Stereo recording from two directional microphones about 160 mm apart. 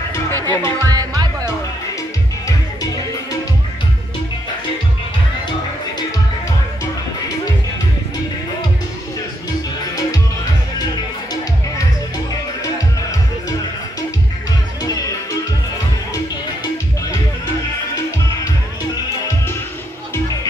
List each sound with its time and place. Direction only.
0.5 s speech: 15° left (ahead or behind)
0.8 s music: 25° right (ahead or behind)